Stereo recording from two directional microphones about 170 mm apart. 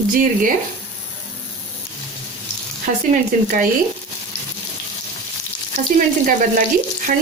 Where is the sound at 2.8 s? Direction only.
50° right (ahead or behind).